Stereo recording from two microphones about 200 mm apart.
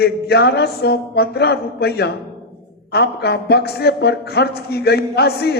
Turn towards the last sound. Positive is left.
turn(degrees=55)  # may be behind; listen again after turning